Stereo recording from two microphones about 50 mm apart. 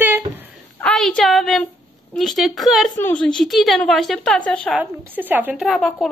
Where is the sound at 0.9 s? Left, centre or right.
Centre.